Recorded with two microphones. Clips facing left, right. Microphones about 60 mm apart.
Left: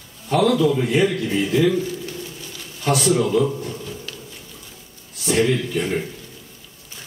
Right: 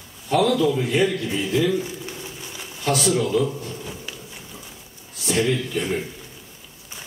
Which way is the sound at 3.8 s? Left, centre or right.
Centre.